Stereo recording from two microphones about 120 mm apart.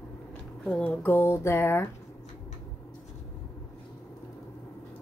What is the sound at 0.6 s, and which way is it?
Speech, 10° left (ahead or behind).